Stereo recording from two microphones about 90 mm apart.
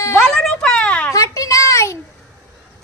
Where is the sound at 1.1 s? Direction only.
40° left (ahead or behind).